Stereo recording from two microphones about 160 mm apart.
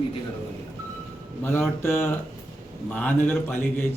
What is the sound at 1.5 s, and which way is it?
Speech, 15° left (ahead or behind).